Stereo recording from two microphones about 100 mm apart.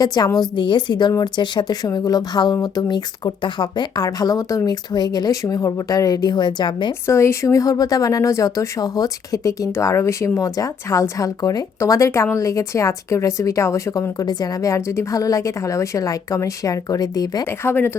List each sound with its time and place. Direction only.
0.0 s speech: 40° left (ahead or behind)
0.3 s speech: 50° left (ahead or behind)
7.1 s speech: 25° left (ahead or behind)
17.4 s speech: 25° left (ahead or behind)